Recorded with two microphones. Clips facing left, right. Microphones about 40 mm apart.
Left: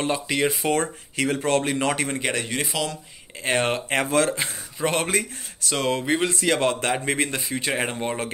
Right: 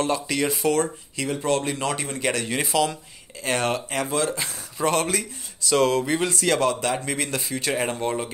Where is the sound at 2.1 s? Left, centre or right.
Centre.